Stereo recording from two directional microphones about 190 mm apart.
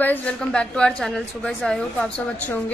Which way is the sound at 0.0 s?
10° left (ahead or behind).